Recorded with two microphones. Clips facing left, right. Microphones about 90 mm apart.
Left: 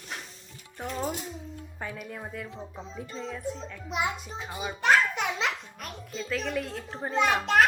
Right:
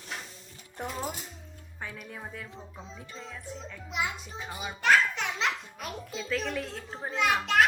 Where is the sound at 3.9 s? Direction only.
25° left (ahead or behind).